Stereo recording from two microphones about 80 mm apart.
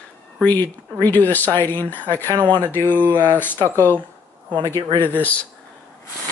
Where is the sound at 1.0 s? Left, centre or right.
Left.